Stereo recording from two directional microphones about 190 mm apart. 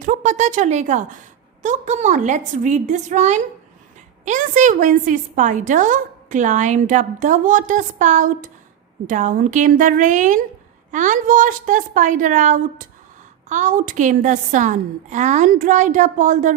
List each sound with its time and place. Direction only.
0.0 s a woman's voice: 45° right (ahead or behind)